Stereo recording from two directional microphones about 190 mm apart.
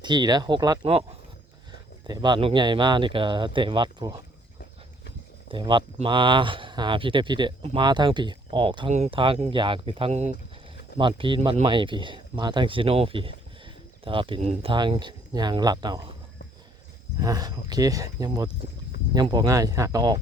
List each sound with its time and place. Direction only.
0.0 s speech: 25° right (ahead or behind)
2.0 s speech: 20° right (ahead or behind)
5.5 s speech: 25° right (ahead or behind)
10.9 s speech: 25° right (ahead or behind)
17.2 s speech: 20° right (ahead or behind)